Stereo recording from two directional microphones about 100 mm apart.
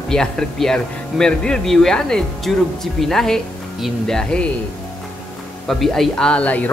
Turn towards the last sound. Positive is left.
turn(degrees=15)  # may be behind; listen again after turning